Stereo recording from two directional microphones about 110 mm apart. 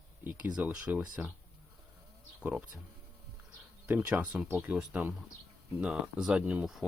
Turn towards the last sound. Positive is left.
turn(degrees=-5)  # may be behind; listen again after turning